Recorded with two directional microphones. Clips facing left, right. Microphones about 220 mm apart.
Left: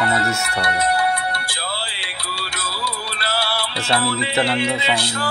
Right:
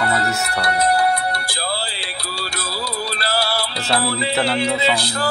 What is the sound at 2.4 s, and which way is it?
Music, 40° right (ahead or behind).